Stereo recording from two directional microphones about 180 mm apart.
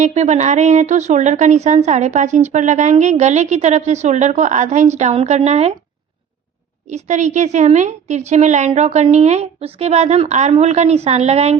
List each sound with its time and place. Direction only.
0.0 s speech: 40° right (ahead or behind)
6.9 s speech: 40° right (ahead or behind)